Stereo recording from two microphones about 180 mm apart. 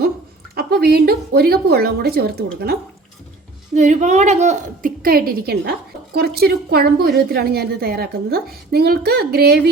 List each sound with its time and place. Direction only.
0.5 s a woman's voice: 60° right (ahead or behind)
3.8 s a woman's voice: 40° right (ahead or behind); by 9.6 s 60° right (ahead or behind)